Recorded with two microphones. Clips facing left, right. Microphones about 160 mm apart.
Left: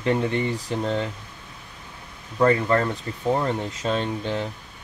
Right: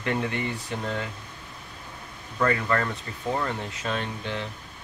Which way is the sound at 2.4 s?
30° left (ahead or behind).